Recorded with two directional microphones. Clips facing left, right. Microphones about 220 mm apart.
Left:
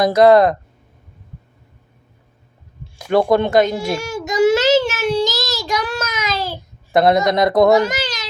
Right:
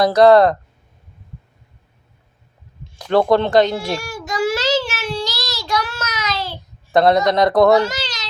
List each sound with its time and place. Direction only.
0.2 s speech: 10° left (ahead or behind)
2.8 s baby cry: 10° left (ahead or behind)
6.9 s speech: 15° left (ahead or behind)